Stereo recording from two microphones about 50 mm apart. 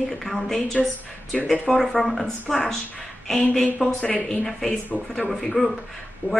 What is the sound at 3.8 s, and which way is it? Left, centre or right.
Speech, centre.